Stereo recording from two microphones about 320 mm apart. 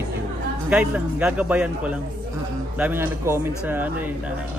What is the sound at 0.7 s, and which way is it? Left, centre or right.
A man's voice, centre.